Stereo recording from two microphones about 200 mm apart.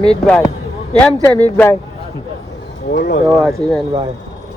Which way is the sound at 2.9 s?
50° left (ahead or behind).